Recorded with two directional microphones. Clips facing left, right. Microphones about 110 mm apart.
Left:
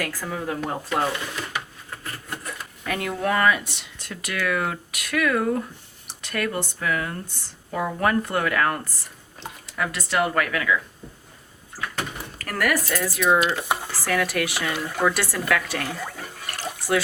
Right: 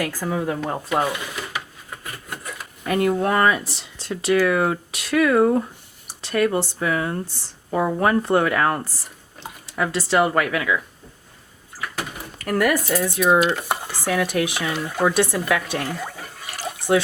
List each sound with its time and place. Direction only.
0.0 s speech: 25° right (ahead or behind)
2.8 s speech: 35° right (ahead or behind)
12.5 s speech: 20° right (ahead or behind)
13.4 s speech: centre (ahead or behind)
14.0 s speech: 20° right (ahead or behind)
14.6 s speech: 10° right (ahead or behind)
15.0 s speech: 20° right (ahead or behind)
15.9 s a sound: 10° right (ahead or behind)